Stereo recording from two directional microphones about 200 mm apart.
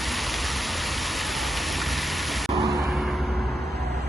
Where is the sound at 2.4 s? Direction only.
Centre (ahead or behind).